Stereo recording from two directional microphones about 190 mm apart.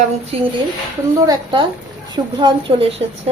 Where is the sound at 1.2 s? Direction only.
25° right (ahead or behind).